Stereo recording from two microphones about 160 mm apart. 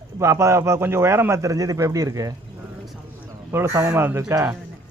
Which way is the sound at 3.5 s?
15° right (ahead or behind).